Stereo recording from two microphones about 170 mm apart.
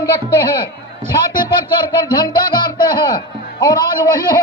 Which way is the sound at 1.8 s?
25° left (ahead or behind).